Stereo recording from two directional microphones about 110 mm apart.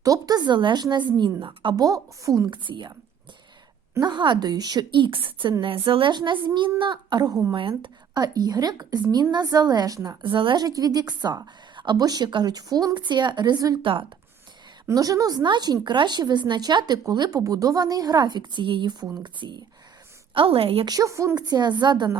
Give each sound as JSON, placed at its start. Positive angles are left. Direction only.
{"t": 0.0, "sound": "a woman's voice", "side_deg": -35}
{"t": 1.7, "sound": "speech", "side_deg": -35}
{"t": 2.5, "sound": "a woman's voice", "side_deg": -45}
{"t": 4.0, "sound": "a woman's voice", "side_deg": -45}
{"t": 10.3, "sound": "a woman's voice", "side_deg": -50}
{"t": 10.6, "sound": "a woman's voice", "side_deg": -35}
{"t": 14.8, "sound": "a woman's voice", "side_deg": -30}
{"t": 20.3, "sound": "a woman's voice", "side_deg": -55}
{"t": 20.8, "sound": "speech", "side_deg": -30}